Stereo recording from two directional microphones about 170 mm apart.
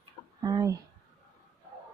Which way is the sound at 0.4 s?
20° right (ahead or behind).